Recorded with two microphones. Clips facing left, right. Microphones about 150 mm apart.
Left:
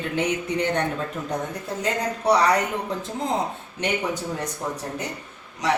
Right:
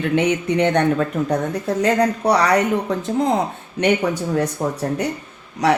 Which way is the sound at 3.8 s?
70° right (ahead or behind).